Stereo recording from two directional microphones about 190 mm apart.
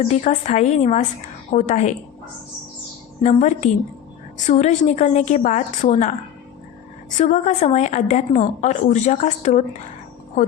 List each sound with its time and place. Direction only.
0.1 s a woman's voice: 35° left (ahead or behind)
3.2 s a woman's voice: 40° left (ahead or behind)
7.2 s a woman's voice: 40° left (ahead or behind)